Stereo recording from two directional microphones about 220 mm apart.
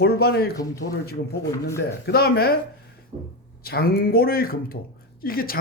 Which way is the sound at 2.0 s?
45° left (ahead or behind).